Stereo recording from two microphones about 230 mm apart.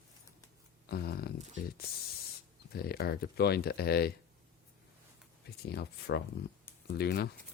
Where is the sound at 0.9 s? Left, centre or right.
Left.